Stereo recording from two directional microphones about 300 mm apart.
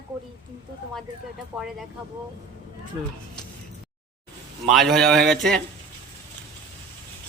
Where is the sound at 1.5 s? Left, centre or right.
Centre.